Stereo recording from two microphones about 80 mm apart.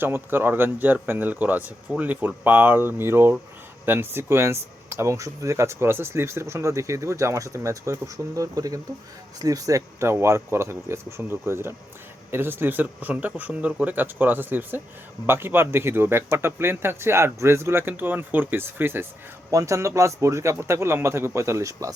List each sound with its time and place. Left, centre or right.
0.0 s speech: right
19.5 s speech: right